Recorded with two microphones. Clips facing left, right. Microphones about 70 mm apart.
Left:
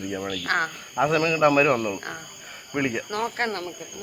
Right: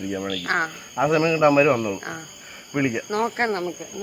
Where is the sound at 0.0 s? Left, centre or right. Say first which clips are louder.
Right 2 dB; centre.